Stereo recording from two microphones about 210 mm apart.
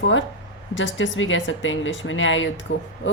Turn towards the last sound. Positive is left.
turn(degrees=60)  # may be behind; listen again after turning